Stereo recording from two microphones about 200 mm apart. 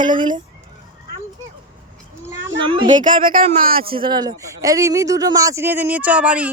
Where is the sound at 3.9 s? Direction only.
25° right (ahead or behind).